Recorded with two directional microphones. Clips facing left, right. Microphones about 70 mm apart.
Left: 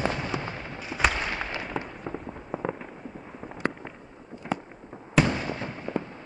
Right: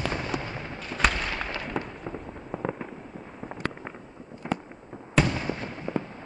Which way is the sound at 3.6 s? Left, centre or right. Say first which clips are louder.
Left 4 dB; left.